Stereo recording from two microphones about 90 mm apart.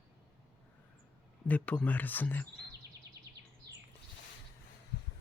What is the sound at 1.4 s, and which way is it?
Speech, 15° left (ahead or behind).